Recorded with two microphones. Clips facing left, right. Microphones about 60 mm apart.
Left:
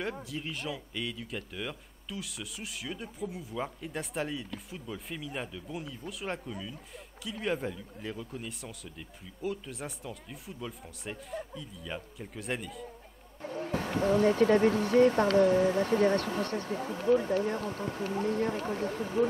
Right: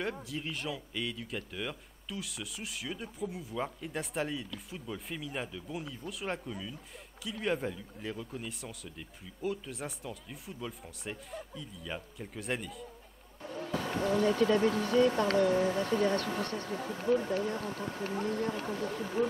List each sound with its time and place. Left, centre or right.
0.0 s speech: centre
13.4 s speech: left